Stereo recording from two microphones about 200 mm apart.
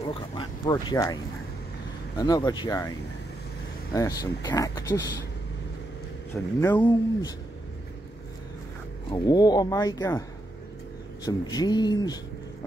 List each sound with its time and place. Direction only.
0.1 s speech: 25° left (ahead or behind)
3.9 s speech: 15° left (ahead or behind)
6.3 s speech: 15° left (ahead or behind)
9.1 s speech: 20° left (ahead or behind)
11.2 s speech: 20° left (ahead or behind)